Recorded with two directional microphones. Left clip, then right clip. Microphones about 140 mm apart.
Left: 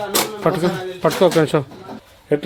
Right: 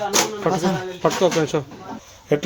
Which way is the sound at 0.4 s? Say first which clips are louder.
Left 2 dB; 60° left (ahead or behind).